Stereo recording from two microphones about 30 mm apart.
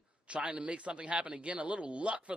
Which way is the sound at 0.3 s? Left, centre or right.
Right.